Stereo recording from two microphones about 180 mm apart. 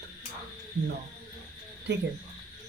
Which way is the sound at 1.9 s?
75° right (ahead or behind).